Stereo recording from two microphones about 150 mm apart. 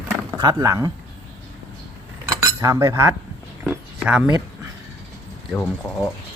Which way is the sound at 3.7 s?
10° right (ahead or behind).